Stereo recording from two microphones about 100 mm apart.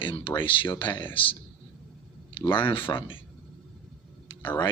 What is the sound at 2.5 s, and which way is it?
Speech, 60° left (ahead or behind).